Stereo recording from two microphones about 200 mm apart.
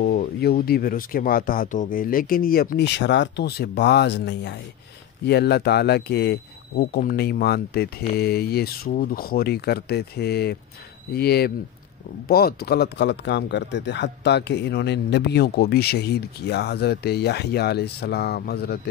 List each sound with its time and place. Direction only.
0.0 s speech: 50° left (ahead or behind)